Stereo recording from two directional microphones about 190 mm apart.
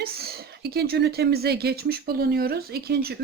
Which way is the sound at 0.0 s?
55° right (ahead or behind).